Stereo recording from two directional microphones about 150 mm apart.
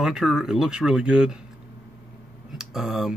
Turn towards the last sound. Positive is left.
turn(degrees=0)  # may be behind; listen again after turning